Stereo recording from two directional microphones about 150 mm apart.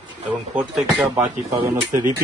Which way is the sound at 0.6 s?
10° right (ahead or behind).